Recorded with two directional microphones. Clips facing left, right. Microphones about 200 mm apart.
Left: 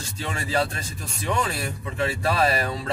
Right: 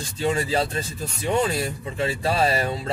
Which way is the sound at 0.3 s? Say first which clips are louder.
Right 2 dB; 30° right (ahead or behind).